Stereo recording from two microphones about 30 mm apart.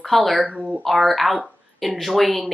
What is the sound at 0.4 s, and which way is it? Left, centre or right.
Speech, right.